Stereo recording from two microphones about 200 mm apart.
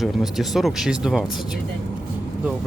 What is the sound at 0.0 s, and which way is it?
Speech, centre (ahead or behind).